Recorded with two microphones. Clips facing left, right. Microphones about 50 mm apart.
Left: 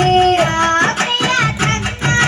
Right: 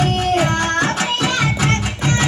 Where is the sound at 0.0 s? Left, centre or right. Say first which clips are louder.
Left 6 dB; left.